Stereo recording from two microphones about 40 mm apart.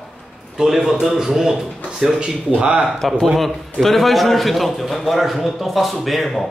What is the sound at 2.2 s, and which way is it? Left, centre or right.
Speech, right.